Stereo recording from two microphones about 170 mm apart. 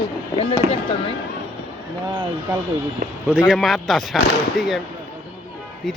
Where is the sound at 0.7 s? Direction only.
30° left (ahead or behind).